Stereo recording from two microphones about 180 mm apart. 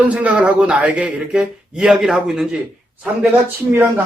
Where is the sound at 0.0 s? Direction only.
5° right (ahead or behind).